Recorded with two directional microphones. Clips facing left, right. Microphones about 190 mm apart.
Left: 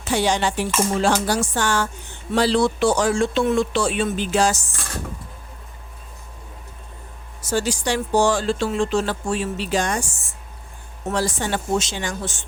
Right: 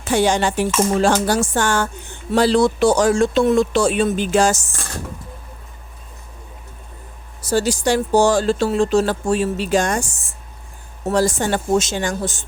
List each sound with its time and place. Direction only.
0.0 s speech: 50° right (ahead or behind)
7.4 s speech: 40° right (ahead or behind)
11.1 s speech: 45° right (ahead or behind)